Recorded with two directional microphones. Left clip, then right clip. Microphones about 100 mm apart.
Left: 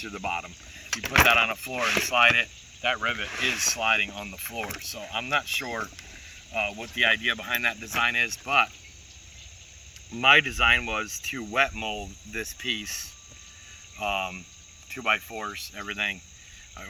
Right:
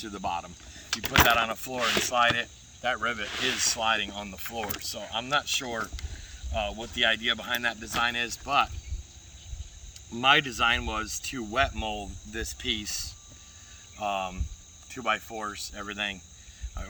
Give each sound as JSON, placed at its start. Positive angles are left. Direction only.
{"t": 0.0, "sound": "speech", "side_deg": -15}
{"t": 3.2, "sound": "speech", "side_deg": 0}
{"t": 10.1, "sound": "speech", "side_deg": -10}
{"t": 12.0, "sound": "speech", "side_deg": -5}
{"t": 14.0, "sound": "speech", "side_deg": -15}